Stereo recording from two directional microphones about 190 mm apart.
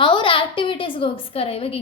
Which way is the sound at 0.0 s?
25° left (ahead or behind).